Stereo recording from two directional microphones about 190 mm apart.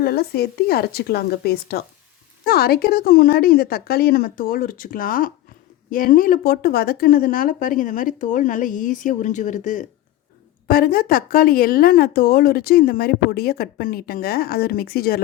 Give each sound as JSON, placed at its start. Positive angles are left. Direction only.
{"t": 0.0, "sound": "a woman's voice", "side_deg": 55}